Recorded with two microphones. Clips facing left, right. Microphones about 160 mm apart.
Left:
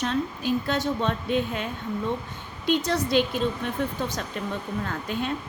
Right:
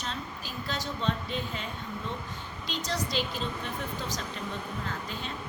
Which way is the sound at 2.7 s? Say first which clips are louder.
Left 10 dB; 55° left (ahead or behind).